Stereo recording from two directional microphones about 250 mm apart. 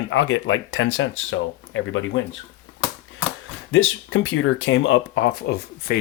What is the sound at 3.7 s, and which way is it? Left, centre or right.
Speech, left.